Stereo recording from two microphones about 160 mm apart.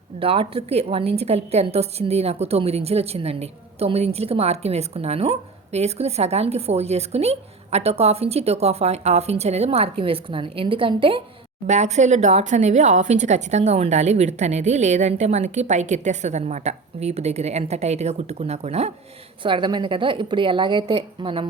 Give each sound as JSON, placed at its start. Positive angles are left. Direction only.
{"t": 0.2, "sound": "a woman's voice", "side_deg": -35}
{"t": 11.6, "sound": "speech", "side_deg": -45}
{"t": 19.4, "sound": "a woman's voice", "side_deg": -30}